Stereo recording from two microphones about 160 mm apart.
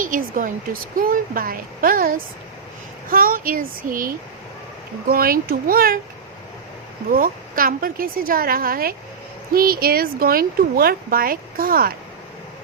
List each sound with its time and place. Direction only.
0.0 s a woman's voice: 60° right (ahead or behind)
7.1 s a woman's voice: 60° right (ahead or behind)